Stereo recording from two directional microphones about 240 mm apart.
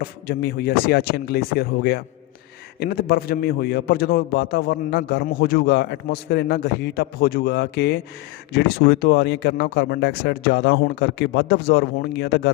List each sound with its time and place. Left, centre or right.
0.0 s a man's voice: left